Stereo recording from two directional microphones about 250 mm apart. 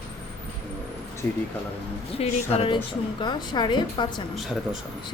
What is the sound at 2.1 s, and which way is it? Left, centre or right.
A woman's voice, left.